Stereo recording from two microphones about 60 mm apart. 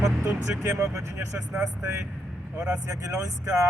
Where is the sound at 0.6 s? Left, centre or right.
Right.